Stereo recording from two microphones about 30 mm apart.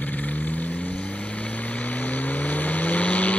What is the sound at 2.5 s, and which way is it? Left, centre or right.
Vehicle, left.